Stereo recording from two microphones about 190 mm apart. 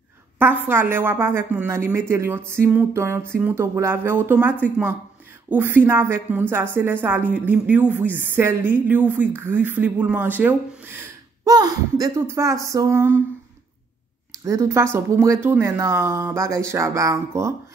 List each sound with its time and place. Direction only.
0.4 s a woman's voice: 10° right (ahead or behind)
14.3 s a woman's voice: 15° right (ahead or behind)